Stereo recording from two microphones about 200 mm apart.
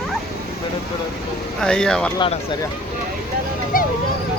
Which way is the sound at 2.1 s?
25° left (ahead or behind).